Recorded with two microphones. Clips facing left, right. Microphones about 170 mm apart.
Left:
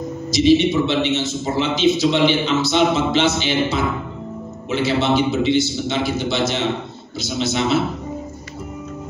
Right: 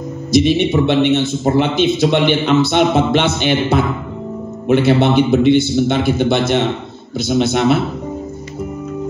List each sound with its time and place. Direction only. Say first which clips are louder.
0.3 s a man's voice: right 1 dB; 55° right (ahead or behind)